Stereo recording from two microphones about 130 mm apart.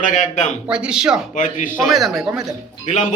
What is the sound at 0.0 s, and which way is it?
Speech, 70° left (ahead or behind).